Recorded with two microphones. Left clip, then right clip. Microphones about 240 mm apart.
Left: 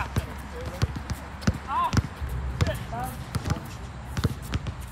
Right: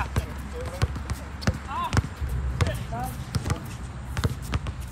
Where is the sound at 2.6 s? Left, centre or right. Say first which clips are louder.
Even; right.